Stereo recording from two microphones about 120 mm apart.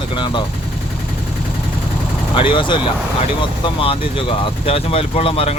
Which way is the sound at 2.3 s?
45° left (ahead or behind).